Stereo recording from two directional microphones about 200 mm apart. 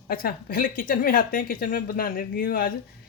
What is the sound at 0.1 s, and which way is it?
Speech, 45° left (ahead or behind).